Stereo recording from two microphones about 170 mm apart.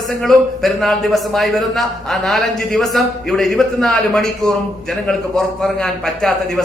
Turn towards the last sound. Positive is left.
turn(degrees=0)  # may be behind; listen again after turning